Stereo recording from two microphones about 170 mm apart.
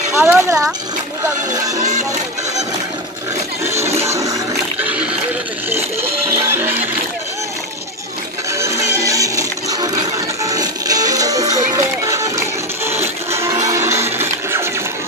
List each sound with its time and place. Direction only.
0.1 s speech: 15° right (ahead or behind)
1.8 s music: 45° right (ahead or behind)
4.0 s music: 20° right (ahead or behind)
6.5 s music: 10° right (ahead or behind)
8.5 s music: 15° right (ahead or behind)